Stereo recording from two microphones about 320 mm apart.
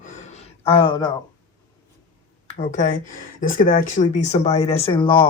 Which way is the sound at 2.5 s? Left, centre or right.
Left.